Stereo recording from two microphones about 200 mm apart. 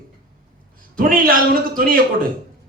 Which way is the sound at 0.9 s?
45° right (ahead or behind).